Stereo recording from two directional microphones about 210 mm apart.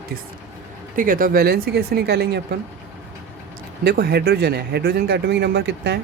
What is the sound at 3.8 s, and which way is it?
Speech, 50° right (ahead or behind).